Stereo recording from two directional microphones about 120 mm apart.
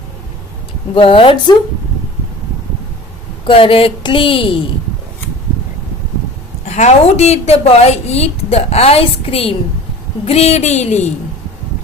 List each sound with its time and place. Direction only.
0.9 s a woman's voice: 50° left (ahead or behind)
3.4 s a woman's voice: 50° left (ahead or behind)
6.7 s a woman's voice: 70° left (ahead or behind)